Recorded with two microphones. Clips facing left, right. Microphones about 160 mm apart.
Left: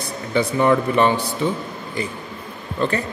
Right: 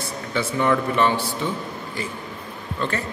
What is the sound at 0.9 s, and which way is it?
Speech, 15° left (ahead or behind).